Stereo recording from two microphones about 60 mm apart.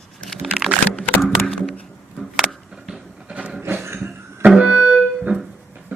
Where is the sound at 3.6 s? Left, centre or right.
Right.